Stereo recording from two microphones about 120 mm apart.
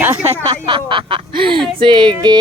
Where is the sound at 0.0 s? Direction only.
15° right (ahead or behind).